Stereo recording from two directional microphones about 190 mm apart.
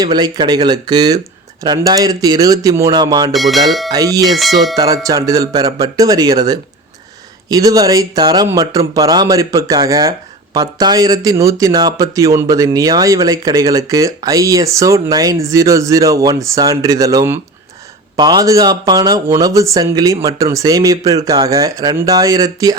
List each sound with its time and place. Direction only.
0.0 s speech: 20° right (ahead or behind)
3.3 s speech: centre (ahead or behind)
3.9 s speech: 20° right (ahead or behind)
4.4 s speech: centre (ahead or behind)
5.0 s speech: 20° right (ahead or behind)